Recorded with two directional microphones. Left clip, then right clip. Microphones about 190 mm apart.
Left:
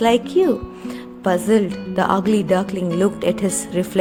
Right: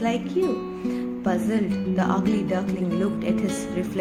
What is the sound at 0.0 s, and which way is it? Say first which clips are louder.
Speech: left 9 dB; 45° left (ahead or behind).